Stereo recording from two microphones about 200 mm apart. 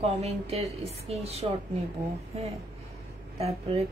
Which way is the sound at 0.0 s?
30° right (ahead or behind).